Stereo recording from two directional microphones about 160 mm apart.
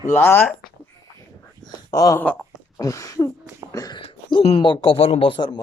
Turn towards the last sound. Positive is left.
turn(degrees=30)  # may be behind; listen again after turning